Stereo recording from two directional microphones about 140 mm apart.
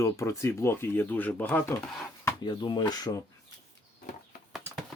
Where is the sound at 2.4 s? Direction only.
30° left (ahead or behind).